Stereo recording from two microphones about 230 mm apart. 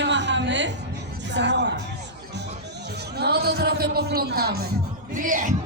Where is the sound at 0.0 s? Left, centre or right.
Right.